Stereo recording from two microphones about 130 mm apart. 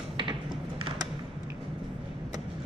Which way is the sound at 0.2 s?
40° right (ahead or behind).